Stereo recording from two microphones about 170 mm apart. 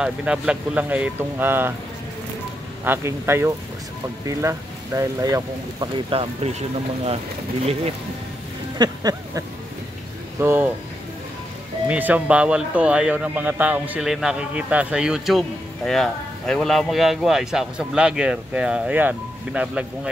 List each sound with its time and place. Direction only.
0.0 s speech: 5° right (ahead or behind)
2.8 s speech: 15° right (ahead or behind); by 6.5 s 30° right (ahead or behind)
8.7 s speech: 25° right (ahead or behind)
10.4 s speech: 15° right (ahead or behind)
11.9 s speech: 10° right (ahead or behind)